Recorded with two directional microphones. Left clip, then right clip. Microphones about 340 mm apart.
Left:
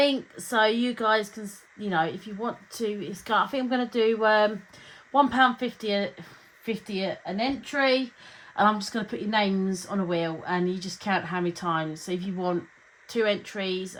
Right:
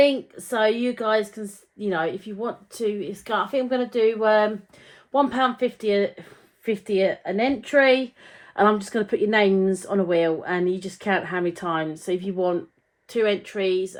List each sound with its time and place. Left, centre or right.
0.0 s speech: left